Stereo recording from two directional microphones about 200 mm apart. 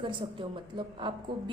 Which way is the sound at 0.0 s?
25° right (ahead or behind).